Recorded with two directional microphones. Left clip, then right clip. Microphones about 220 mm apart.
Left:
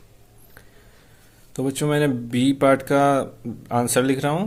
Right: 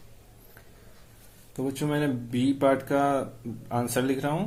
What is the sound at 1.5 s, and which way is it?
Speech, 40° left (ahead or behind).